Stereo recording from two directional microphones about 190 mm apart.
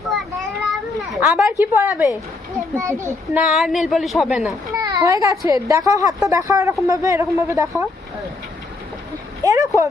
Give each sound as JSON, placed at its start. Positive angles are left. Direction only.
{"t": 0.9, "sound": "a child's voice", "side_deg": -5}
{"t": 3.5, "sound": "a woman's voice", "side_deg": 0}
{"t": 4.7, "sound": "children playing", "side_deg": -20}
{"t": 5.5, "sound": "a woman's voice", "side_deg": -15}
{"t": 9.4, "sound": "a woman's voice", "side_deg": -20}